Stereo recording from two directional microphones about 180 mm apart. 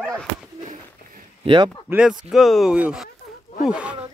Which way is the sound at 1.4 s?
25° right (ahead or behind).